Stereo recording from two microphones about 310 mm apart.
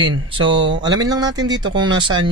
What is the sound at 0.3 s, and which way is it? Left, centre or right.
A man's voice, centre.